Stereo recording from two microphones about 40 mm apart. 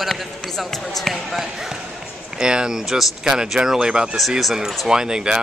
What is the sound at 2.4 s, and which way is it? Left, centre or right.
A woman's voice, centre.